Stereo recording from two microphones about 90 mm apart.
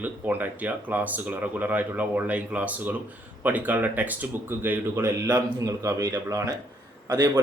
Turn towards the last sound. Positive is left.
turn(degrees=-40)  # may be behind; listen again after turning